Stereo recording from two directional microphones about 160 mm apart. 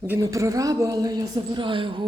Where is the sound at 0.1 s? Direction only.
20° right (ahead or behind).